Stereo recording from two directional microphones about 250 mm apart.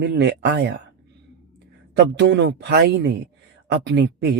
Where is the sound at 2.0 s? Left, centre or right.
Right.